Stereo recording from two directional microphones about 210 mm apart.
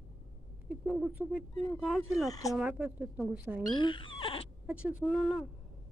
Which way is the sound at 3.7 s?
20° left (ahead or behind).